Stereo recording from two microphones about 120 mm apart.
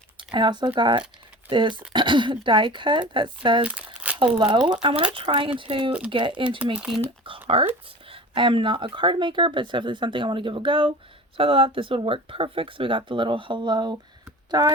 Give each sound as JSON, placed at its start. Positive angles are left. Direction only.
{"t": 0.2, "sound": "speech", "side_deg": -40}
{"t": 3.6, "sound": "crumpling", "side_deg": -10}
{"t": 4.4, "sound": "speech", "side_deg": -40}
{"t": 6.7, "sound": "speech", "side_deg": -5}
{"t": 7.3, "sound": "a sound", "side_deg": -50}
{"t": 8.1, "sound": "speech", "side_deg": -45}